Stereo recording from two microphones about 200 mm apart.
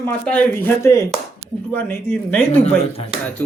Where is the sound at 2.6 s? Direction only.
30° left (ahead or behind).